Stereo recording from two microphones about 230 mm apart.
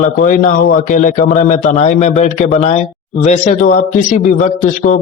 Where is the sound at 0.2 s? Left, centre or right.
Left.